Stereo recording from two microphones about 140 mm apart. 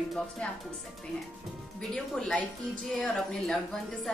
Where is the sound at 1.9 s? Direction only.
5° left (ahead or behind).